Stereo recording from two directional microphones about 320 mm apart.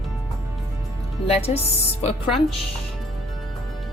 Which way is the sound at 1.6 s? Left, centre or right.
Centre.